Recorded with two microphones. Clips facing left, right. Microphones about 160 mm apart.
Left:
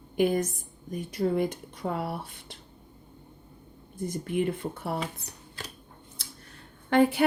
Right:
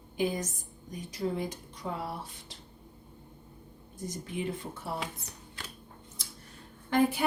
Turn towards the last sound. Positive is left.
turn(degrees=65)  # may be behind; listen again after turning